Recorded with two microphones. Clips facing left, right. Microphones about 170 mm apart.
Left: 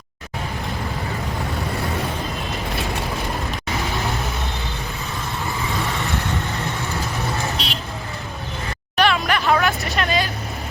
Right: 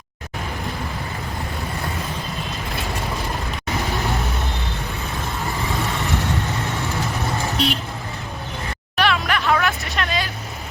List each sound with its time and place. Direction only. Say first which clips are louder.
7.6 s vehicle: right 8 dB; 55° right (ahead or behind)
9.0 s vehicle: left 2 dB; centre (ahead or behind)